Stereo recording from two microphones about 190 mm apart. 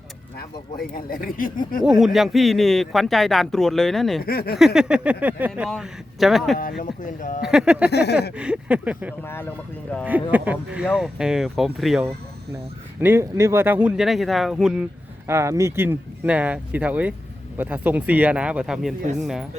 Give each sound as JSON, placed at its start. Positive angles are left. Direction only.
{"t": 0.8, "sound": "speech", "side_deg": 50}
{"t": 2.0, "sound": "speech", "side_deg": 0}
{"t": 4.2, "sound": "speech", "side_deg": 55}
{"t": 4.5, "sound": "speech", "side_deg": 0}
{"t": 7.0, "sound": "speech", "side_deg": 45}
{"t": 7.4, "sound": "speech", "side_deg": -5}
{"t": 7.9, "sound": "a sound", "side_deg": 60}
{"t": 8.4, "sound": "speech", "side_deg": -5}
{"t": 9.2, "sound": "speech", "side_deg": 10}
{"t": 10.0, "sound": "speech", "side_deg": -10}
{"t": 13.0, "sound": "speech", "side_deg": -10}
{"t": 15.3, "sound": "speech", "side_deg": -15}